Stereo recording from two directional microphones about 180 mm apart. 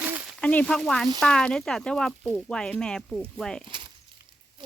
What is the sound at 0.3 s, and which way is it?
Speech, 5° left (ahead or behind).